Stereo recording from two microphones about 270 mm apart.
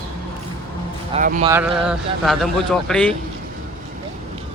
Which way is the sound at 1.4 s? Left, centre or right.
Centre.